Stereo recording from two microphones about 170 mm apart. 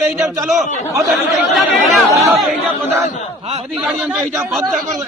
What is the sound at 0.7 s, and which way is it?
Speech, 40° left (ahead or behind).